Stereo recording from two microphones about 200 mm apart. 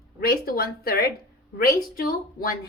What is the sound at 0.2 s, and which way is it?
A woman's voice, 50° left (ahead or behind).